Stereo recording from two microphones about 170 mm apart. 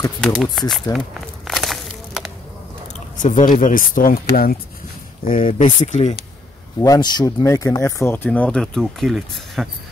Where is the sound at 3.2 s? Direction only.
50° left (ahead or behind).